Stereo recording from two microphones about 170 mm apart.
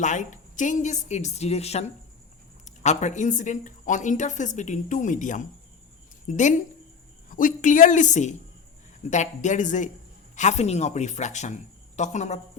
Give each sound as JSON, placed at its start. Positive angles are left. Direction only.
{"t": 0.0, "sound": "a woman's voice", "side_deg": 45}